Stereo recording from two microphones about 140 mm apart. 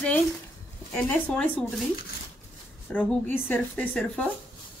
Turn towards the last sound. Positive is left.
turn(degrees=5)  # may be behind; listen again after turning